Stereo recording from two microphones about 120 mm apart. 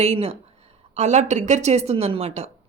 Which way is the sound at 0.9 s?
75° right (ahead or behind).